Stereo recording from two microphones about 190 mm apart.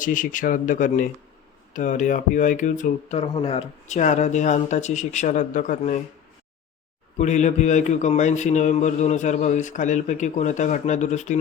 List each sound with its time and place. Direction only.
0.0 s speech: 45° left (ahead or behind)
7.2 s speech: 40° left (ahead or behind)